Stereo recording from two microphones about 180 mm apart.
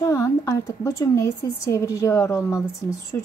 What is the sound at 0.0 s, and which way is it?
A woman's voice, 15° left (ahead or behind).